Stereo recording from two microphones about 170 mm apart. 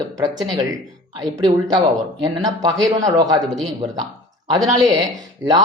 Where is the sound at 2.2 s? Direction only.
25° right (ahead or behind).